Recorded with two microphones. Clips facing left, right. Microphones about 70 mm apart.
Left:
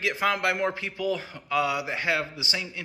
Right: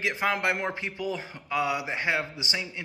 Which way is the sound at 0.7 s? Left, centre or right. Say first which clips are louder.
Left 3 dB; right.